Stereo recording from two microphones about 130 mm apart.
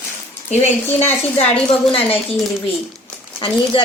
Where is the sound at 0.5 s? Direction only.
60° left (ahead or behind).